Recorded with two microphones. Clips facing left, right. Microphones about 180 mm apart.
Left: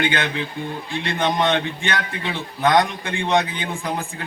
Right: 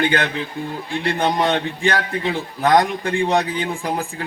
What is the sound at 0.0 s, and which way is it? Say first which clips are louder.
A man's voice: right 2 dB; 35° right (ahead or behind).